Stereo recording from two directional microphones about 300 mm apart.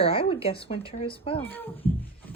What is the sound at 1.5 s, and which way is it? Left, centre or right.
Speech, centre.